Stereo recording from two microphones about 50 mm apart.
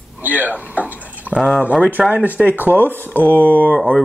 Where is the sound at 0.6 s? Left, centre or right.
Right.